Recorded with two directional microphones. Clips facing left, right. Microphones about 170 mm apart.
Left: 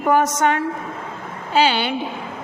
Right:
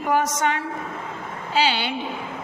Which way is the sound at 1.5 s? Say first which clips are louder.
Left 5 dB; 50° left (ahead or behind).